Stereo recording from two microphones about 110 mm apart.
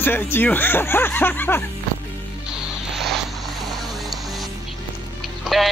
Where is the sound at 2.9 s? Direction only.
Centre (ahead or behind).